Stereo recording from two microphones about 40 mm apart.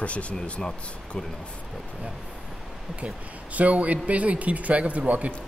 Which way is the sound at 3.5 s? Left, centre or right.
Right.